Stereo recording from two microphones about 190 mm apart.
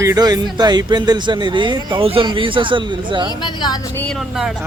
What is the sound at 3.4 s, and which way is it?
Speech, 20° left (ahead or behind).